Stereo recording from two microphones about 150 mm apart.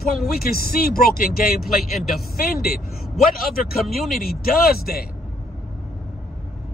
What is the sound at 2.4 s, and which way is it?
Speech, 75° left (ahead or behind).